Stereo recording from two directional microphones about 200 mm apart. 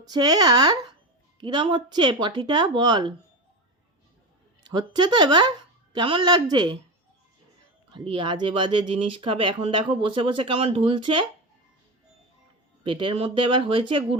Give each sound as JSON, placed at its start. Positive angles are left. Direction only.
{"t": 0.0, "sound": "speech", "side_deg": -20}
{"t": 4.6, "sound": "a woman's voice", "side_deg": -20}
{"t": 7.9, "sound": "speech", "side_deg": -25}
{"t": 12.8, "sound": "speech", "side_deg": -25}